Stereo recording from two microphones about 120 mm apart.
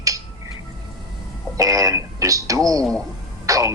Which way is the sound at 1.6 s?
30° right (ahead or behind).